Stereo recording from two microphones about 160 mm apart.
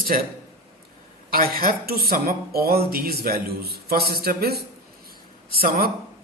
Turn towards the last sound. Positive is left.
turn(degrees=-70)  # may be behind; listen again after turning